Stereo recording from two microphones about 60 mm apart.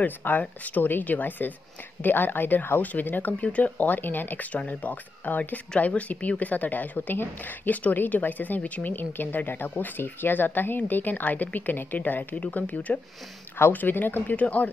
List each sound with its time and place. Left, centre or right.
0.0 s speech: left